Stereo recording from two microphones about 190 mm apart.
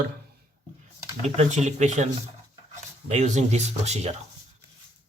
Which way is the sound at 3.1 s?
35° right (ahead or behind).